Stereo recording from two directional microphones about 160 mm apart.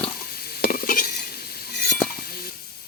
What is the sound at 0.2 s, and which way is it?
Stir, 70° left (ahead or behind).